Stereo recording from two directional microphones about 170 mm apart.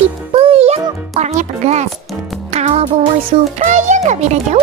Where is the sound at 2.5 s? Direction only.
40° right (ahead or behind).